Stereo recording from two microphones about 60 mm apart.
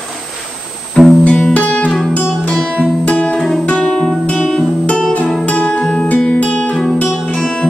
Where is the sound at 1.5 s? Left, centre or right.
Left.